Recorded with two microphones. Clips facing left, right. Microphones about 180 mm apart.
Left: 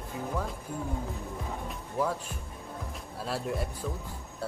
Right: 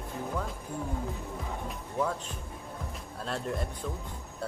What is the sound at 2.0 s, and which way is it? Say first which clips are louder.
Speech: left 1 dB; 5° left (ahead or behind).